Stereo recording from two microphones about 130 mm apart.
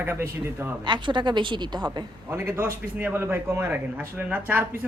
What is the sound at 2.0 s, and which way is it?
Speech, 20° right (ahead or behind).